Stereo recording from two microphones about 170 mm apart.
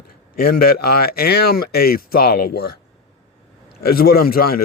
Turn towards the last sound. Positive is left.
turn(degrees=60)  # may be behind; listen again after turning